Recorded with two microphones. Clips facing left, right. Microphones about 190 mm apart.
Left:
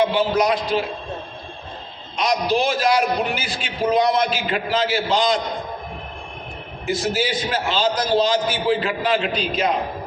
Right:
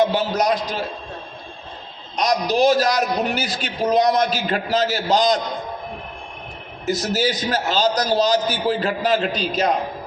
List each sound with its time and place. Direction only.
0.0 s a man's voice: 40° right (ahead or behind)
2.1 s a man's voice: 40° right (ahead or behind)
6.8 s a man's voice: 40° right (ahead or behind)